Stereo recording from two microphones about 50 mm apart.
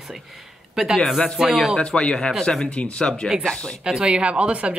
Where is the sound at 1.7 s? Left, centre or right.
Centre.